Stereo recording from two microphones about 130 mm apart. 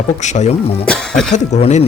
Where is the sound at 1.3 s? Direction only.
60° left (ahead or behind).